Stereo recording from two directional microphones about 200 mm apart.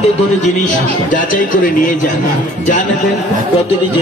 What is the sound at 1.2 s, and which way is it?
Speech, 45° left (ahead or behind).